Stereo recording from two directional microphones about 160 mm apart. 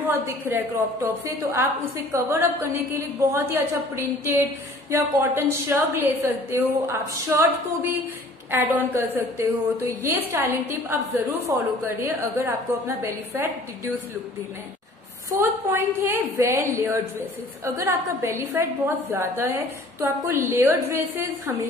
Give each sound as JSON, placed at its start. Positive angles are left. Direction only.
{"t": 0.0, "sound": "a woman's voice", "side_deg": -15}
{"t": 15.3, "sound": "a woman's voice", "side_deg": -20}